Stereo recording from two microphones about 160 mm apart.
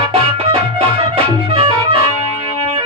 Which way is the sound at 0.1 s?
35° right (ahead or behind).